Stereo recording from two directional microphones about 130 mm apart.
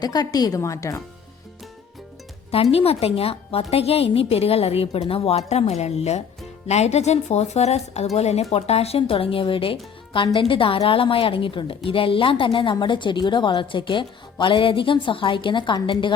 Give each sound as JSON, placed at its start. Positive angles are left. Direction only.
{"t": 0.0, "sound": "speech", "side_deg": 30}
{"t": 2.5, "sound": "a woman's voice", "side_deg": 50}